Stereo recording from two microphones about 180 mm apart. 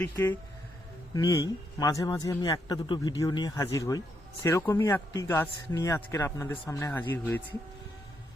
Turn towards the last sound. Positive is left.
turn(degrees=10)  # may be behind; listen again after turning